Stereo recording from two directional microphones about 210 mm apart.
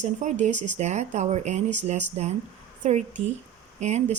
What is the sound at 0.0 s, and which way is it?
Speech, 35° right (ahead or behind).